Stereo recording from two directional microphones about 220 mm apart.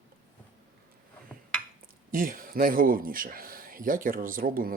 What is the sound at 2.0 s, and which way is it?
Speech, 40° right (ahead or behind).